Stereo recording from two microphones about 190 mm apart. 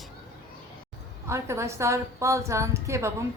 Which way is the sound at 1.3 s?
15° right (ahead or behind).